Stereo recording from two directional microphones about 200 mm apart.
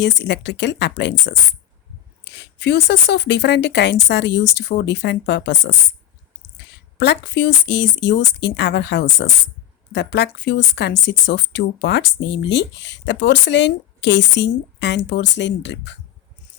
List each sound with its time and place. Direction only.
0.0 s a woman's voice: 60° left (ahead or behind)